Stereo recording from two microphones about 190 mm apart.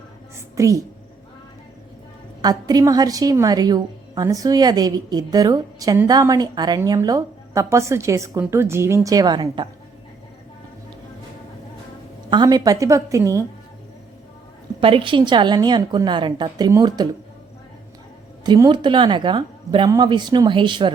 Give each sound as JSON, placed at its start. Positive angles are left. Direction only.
{"t": 0.3, "sound": "a sound", "side_deg": -15}
{"t": 2.4, "sound": "a woman's voice", "side_deg": -20}
{"t": 12.3, "sound": "a woman's voice", "side_deg": -20}
{"t": 14.8, "sound": "a woman's voice", "side_deg": -25}
{"t": 18.4, "sound": "a woman's voice", "side_deg": -20}